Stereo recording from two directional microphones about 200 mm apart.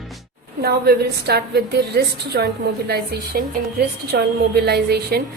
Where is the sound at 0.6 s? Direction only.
50° right (ahead or behind).